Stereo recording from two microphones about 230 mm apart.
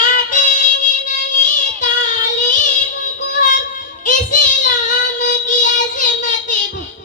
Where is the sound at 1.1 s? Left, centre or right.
Left.